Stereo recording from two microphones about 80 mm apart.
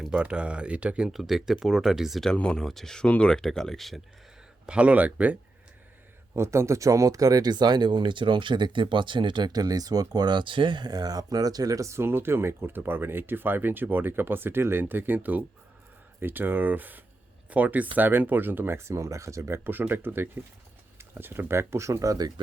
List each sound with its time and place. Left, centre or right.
0.1 s speech: centre
1.1 s speech: centre
2.3 s speech: centre
4.6 s speech: centre
6.3 s speech: right